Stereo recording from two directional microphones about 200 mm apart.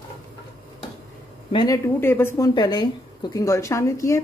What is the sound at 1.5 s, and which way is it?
Speech, 20° left (ahead or behind).